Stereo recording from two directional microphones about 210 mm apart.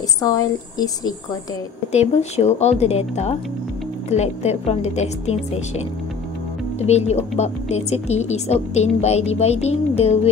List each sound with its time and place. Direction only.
0.2 s speech: 15° left (ahead or behind)
1.9 s a woman's voice: 30° left (ahead or behind)
6.8 s a woman's voice: 30° left (ahead or behind)